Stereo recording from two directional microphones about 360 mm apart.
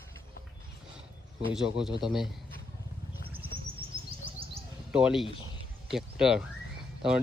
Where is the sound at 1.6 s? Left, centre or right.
Centre.